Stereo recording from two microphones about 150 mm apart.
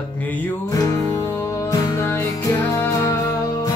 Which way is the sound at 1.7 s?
20° left (ahead or behind).